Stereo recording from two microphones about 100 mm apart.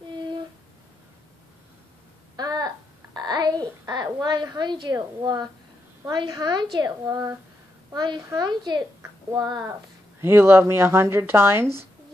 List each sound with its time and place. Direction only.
2.3 s a sound: 40° right (ahead or behind)
3.9 s a woman's voice: 40° right (ahead or behind)
10.2 s speech: 25° right (ahead or behind)